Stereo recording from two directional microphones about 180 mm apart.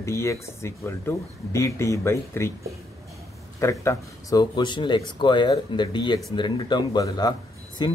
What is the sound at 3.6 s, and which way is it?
Speech, 15° left (ahead or behind).